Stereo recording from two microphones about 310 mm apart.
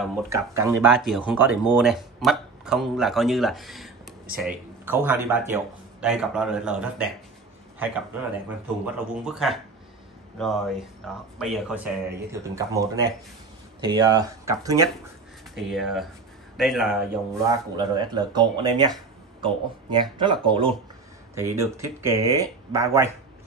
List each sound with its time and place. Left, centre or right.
0.0 s speech: centre
9.1 s speech: centre
17.5 s speech: centre